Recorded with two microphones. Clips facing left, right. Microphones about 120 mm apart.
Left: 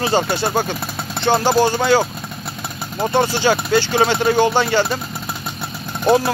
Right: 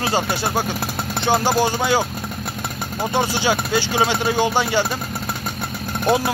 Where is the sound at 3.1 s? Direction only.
10° right (ahead or behind).